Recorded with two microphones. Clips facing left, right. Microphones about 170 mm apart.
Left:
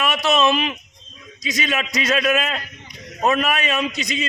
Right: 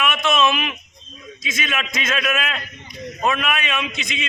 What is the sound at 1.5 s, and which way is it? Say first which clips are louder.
Speech: left 3 dB; 35° left (ahead or behind).